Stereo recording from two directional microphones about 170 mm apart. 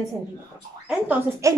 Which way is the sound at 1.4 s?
20° right (ahead or behind).